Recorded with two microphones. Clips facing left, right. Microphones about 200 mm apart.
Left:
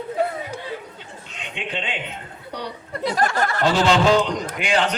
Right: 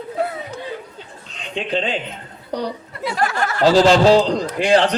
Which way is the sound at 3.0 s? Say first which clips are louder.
Even; 40° left (ahead or behind).